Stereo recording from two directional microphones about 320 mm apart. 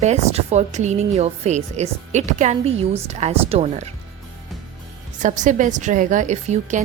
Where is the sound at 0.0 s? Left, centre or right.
Right.